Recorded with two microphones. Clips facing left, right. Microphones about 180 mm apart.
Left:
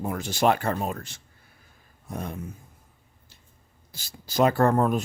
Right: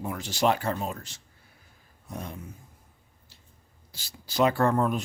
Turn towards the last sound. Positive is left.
turn(degrees=45)  # may be behind; listen again after turning